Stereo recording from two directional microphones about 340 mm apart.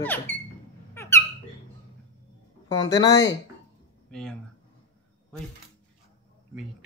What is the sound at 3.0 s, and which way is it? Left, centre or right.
Speech, centre.